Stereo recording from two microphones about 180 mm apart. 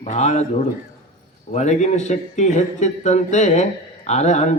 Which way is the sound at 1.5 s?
40° left (ahead or behind).